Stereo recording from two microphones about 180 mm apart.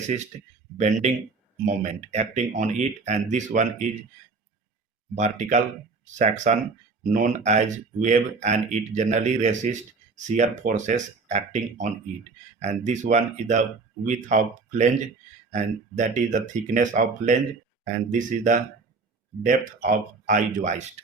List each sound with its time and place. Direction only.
1.6 s speech: 40° right (ahead or behind)
5.1 s speech: 40° right (ahead or behind)